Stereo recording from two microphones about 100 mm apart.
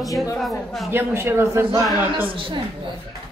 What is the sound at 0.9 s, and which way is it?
Speech, 25° right (ahead or behind).